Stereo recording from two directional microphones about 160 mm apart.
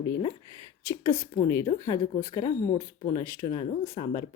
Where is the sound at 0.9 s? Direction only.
20° left (ahead or behind).